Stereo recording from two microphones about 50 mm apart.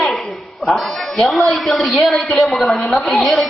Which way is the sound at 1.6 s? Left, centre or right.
Centre.